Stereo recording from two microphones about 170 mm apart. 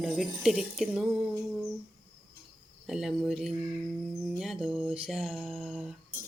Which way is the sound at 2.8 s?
Centre (ahead or behind).